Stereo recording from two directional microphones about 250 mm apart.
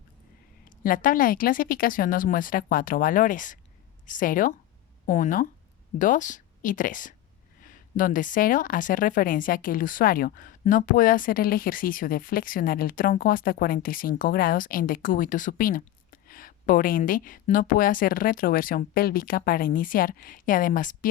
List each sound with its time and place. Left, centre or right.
0.8 s speech: left